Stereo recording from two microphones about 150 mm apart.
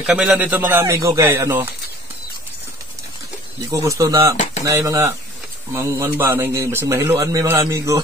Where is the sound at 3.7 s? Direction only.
20° right (ahead or behind).